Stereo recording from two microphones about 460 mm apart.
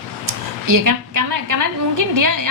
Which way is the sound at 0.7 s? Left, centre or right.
Right.